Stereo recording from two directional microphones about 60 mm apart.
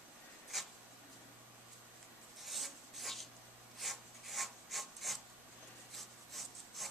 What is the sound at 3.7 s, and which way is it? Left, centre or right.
Wood, centre.